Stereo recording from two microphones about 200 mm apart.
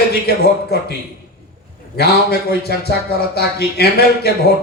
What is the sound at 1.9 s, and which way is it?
A man's voice, 55° left (ahead or behind).